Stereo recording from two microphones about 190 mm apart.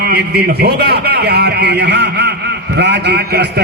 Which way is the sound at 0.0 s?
55° right (ahead or behind).